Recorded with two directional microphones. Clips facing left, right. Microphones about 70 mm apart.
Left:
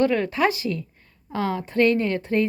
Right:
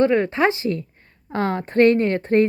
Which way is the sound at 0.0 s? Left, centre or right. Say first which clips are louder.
Right 3 dB; right.